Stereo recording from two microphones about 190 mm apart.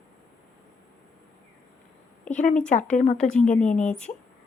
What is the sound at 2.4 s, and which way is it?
Speech, 40° left (ahead or behind).